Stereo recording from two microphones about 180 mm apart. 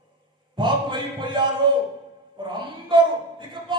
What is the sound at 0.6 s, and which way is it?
A man's voice, 25° right (ahead or behind).